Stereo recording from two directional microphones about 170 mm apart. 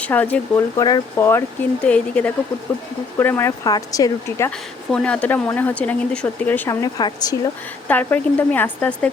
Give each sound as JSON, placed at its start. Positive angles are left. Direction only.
{"t": 0.0, "sound": "speech", "side_deg": 10}
{"t": 0.8, "sound": "speech", "side_deg": 25}
{"t": 4.9, "sound": "speech", "side_deg": 5}
{"t": 6.8, "sound": "speech", "side_deg": 20}
{"t": 7.9, "sound": "speech", "side_deg": 10}